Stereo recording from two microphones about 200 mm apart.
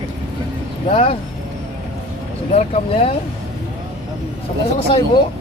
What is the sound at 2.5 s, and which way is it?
Speech, 30° left (ahead or behind).